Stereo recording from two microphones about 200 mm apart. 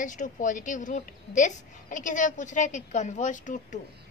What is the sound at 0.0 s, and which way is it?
A woman's voice, 40° left (ahead or behind).